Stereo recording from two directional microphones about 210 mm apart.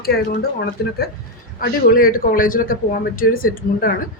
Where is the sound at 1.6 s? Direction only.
45° left (ahead or behind).